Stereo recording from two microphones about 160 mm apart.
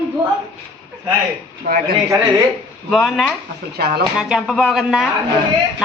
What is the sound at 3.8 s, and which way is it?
Speech, 80° right.